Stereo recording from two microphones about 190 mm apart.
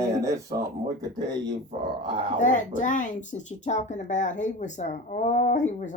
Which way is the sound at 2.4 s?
40° left (ahead or behind).